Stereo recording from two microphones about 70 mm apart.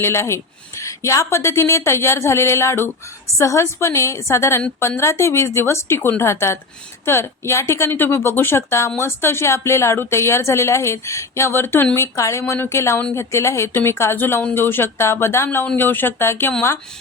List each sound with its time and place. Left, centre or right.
0.0 s a woman's voice: left
11.9 s a woman's voice: left